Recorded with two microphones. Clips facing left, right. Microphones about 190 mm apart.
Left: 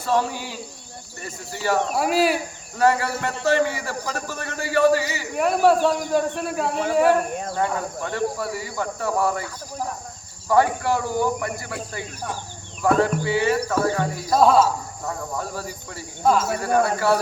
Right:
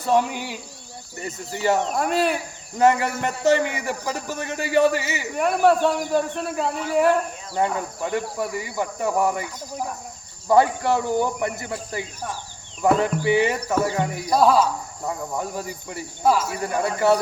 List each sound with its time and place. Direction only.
0.0 s a man's voice: 15° right (ahead or behind)
1.9 s speech: 5° left (ahead or behind)
2.7 s a man's voice: 20° right (ahead or behind)
5.4 s speech: centre (ahead or behind)
7.5 s a man's voice: 15° right (ahead or behind)
12.8 s a man's voice: 20° right (ahead or behind)
14.3 s speech: centre (ahead or behind)
15.0 s a man's voice: 15° right (ahead or behind)
16.2 s speech: 5° right (ahead or behind)
16.8 s speech: 20° right (ahead or behind)